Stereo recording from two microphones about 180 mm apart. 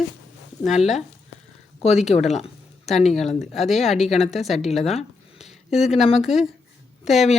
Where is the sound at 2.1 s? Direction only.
40° left (ahead or behind).